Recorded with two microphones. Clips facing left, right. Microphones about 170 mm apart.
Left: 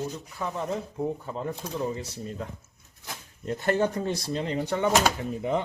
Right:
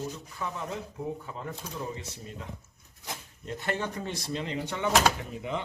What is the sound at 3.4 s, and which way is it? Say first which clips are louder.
Speech: left 8 dB; 45° left (ahead or behind).